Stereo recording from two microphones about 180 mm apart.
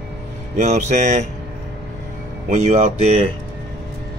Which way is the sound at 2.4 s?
40° right (ahead or behind).